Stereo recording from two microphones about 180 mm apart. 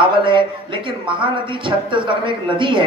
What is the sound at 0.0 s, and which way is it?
A woman's voice, 30° right (ahead or behind).